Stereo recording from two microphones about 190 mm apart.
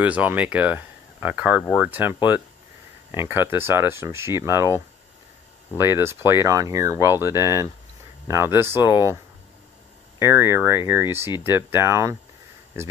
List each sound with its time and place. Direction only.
0.0 s speech: 10° right (ahead or behind)